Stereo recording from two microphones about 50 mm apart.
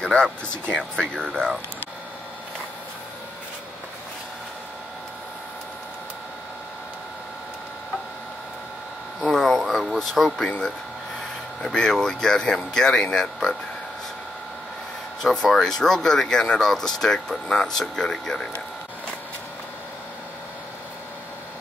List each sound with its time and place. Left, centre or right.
0.0 s speech: centre
9.3 s a sound: centre
9.9 s speech: centre
11.6 s speech: centre
15.2 s speech: centre